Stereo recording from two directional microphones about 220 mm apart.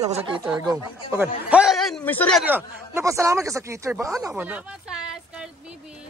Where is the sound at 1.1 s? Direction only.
5° right (ahead or behind).